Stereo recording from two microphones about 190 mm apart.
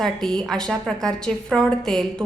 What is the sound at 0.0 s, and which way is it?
A woman's voice, centre (ahead or behind).